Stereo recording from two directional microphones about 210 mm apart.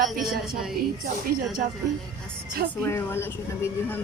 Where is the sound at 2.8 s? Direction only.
10° left (ahead or behind).